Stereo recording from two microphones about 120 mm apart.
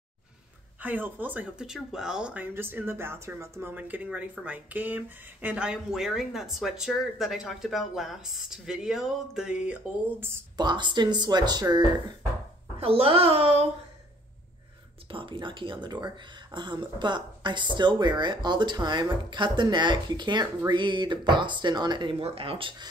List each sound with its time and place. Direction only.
0.8 s speech: 15° right (ahead or behind)
10.6 s speech: 40° right (ahead or behind)
12.7 s speech: 50° right (ahead or behind)
15.0 s speech: 45° right (ahead or behind)
22.2 s speech: 50° right (ahead or behind)